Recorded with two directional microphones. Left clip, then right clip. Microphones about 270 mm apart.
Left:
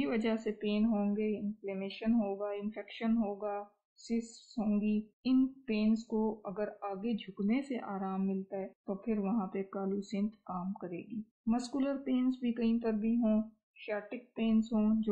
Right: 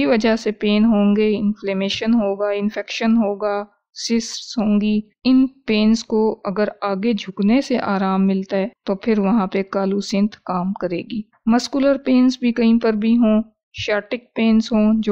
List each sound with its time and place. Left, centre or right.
0.0 s speech: right